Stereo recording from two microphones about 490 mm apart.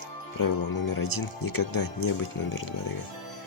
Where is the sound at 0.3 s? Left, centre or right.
Left.